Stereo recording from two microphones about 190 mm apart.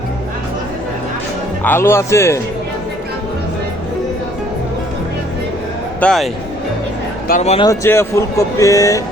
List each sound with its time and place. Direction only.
1.6 s speech: 10° left (ahead or behind)
6.0 s speech: 5° left (ahead or behind)
7.3 s speech: 40° left (ahead or behind)
7.6 s speech: 15° left (ahead or behind)